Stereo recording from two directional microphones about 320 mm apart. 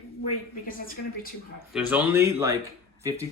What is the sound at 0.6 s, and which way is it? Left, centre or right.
Speech, left.